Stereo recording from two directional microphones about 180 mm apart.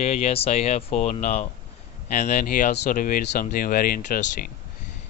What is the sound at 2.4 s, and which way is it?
Speech, 55° left (ahead or behind).